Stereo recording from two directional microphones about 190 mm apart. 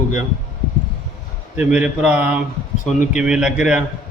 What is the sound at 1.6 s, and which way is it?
Speech, 5° right (ahead or behind).